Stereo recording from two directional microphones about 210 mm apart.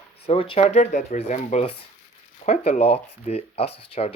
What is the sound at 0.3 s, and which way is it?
Speech, 25° left (ahead or behind).